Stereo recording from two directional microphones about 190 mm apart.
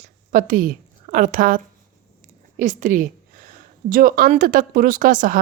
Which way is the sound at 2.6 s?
45° right (ahead or behind).